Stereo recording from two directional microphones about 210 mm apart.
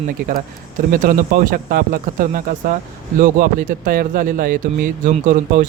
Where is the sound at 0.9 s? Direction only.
45° right (ahead or behind).